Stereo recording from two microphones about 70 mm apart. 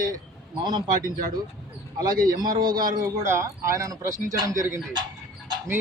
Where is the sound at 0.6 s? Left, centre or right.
Right.